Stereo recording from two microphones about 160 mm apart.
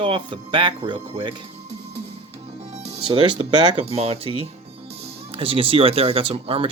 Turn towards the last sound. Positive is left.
turn(degrees=-35)  # may be behind; listen again after turning